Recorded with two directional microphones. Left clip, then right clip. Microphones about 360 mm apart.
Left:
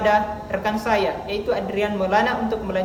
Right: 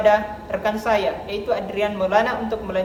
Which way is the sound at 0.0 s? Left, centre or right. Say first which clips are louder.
Right 2 dB; centre.